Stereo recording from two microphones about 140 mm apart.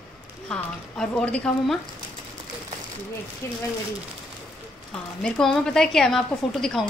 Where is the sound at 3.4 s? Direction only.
20° left (ahead or behind).